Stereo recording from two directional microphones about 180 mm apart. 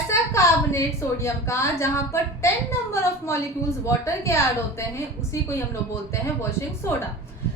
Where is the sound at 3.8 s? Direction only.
15° left (ahead or behind).